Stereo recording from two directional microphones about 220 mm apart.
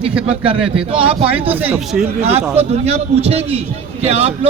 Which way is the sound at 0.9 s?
25° right (ahead or behind).